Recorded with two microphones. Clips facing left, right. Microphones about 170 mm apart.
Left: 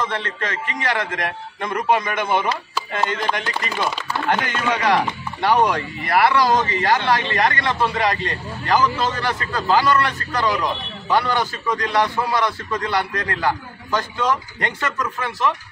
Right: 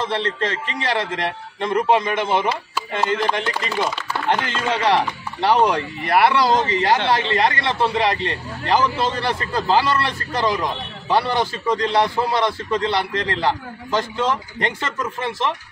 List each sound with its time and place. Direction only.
0.0 s speech: 30° right (ahead or behind)